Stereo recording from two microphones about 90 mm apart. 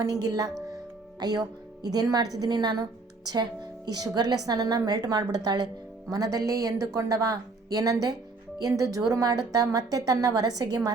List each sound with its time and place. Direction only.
0.0 s a woman's voice: 40° right (ahead or behind)